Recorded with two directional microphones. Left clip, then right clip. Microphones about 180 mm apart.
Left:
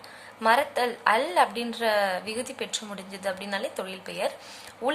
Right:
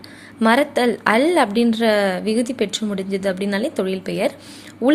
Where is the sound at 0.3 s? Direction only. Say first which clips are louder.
Right 6 dB; 25° right (ahead or behind).